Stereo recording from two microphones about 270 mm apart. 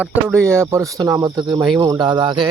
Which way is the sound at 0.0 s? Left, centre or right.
Centre.